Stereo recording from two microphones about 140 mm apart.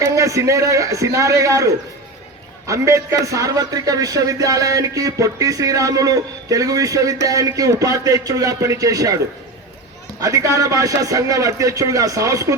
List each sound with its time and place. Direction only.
0.0 s a man's voice: 25° right (ahead or behind)
10.2 s a man's voice: 25° right (ahead or behind)